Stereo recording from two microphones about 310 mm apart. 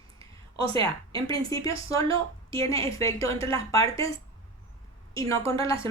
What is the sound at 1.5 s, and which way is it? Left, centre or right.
A woman's voice, centre.